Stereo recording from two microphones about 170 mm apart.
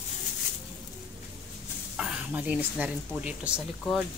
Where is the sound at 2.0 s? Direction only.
5° right (ahead or behind).